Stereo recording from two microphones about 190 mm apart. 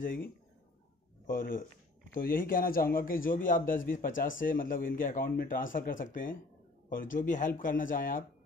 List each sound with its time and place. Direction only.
0.0 s a man's voice: 50° left (ahead or behind)